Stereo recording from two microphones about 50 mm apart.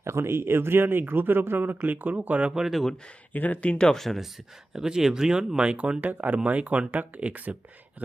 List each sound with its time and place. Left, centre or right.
0.0 s speech: right
2.6 s speech: centre
3.3 s speech: left; by 4.0 s centre
4.0 s speech: centre
4.7 s speech: centre
5.7 s speech: right
6.1 s speech: right